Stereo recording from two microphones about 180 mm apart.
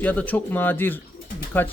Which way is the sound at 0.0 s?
10° left (ahead or behind).